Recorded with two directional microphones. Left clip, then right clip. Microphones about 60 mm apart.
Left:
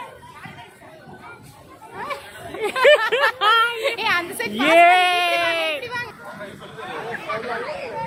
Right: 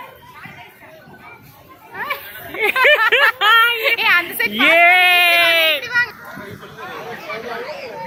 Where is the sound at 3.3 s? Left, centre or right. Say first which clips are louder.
Right 5 dB; right.